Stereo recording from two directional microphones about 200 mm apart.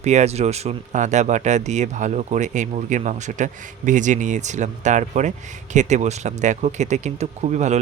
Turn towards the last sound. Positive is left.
turn(degrees=-35)  # may be behind; listen again after turning